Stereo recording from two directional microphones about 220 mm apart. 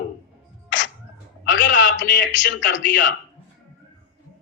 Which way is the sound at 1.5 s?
55° left (ahead or behind).